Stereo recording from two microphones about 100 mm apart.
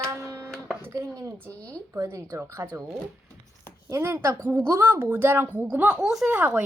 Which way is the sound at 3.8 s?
30° right (ahead or behind).